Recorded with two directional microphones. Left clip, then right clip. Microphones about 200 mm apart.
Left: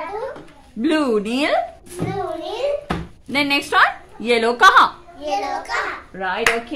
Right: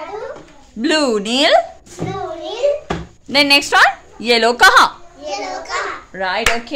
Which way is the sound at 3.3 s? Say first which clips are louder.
Right 6 dB; 30° right (ahead or behind).